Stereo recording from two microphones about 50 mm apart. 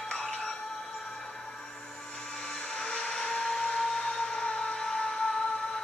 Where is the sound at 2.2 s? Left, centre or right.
Centre.